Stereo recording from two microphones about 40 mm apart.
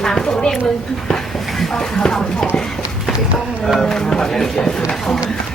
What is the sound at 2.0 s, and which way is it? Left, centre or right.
Speech, centre.